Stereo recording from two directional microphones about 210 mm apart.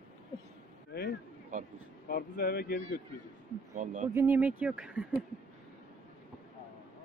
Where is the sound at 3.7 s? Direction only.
40° right (ahead or behind).